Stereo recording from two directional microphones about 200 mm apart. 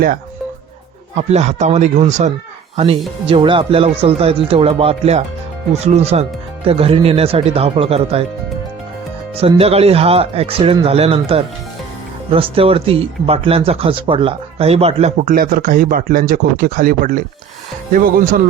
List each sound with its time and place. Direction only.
1.1 s speech: 35° right (ahead or behind)
9.4 s speech: 30° right (ahead or behind)